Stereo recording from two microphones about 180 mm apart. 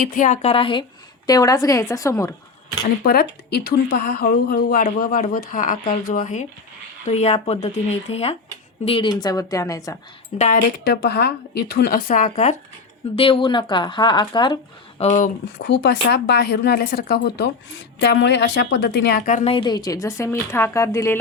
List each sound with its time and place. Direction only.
0.1 s speech: 45° left (ahead or behind)
0.5 s a woman's voice: 30° left (ahead or behind)
2.8 s speech: 55° left (ahead or behind); by 10.0 s 15° left (ahead or behind)
10.3 s speech: 40° left (ahead or behind)
10.8 s speech: 65° left (ahead or behind); by 12.5 s 45° left (ahead or behind)
13.1 s speech: 30° left (ahead or behind)
15.5 s speech: 75° left (ahead or behind)
18.0 s speech: 75° left (ahead or behind)
19.2 s speech: 45° left (ahead or behind)
19.5 s a woman's voice: 25° left (ahead or behind)